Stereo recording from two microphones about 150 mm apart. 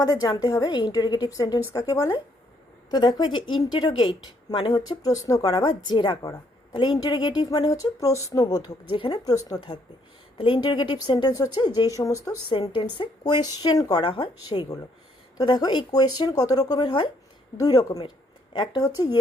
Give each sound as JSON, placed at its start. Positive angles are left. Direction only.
{"t": 0.4, "sound": "a woman's voice", "side_deg": 25}